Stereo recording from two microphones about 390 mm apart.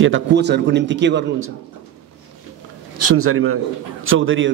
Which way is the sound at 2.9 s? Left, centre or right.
Right.